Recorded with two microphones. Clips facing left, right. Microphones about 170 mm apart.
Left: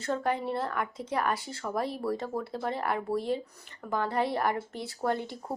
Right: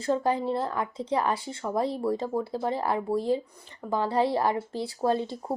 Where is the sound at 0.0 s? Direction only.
25° right (ahead or behind).